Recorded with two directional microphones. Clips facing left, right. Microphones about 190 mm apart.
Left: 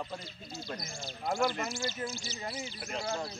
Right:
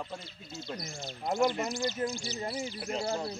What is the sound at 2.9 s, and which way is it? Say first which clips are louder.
Speech: right 3 dB; 30° right (ahead or behind).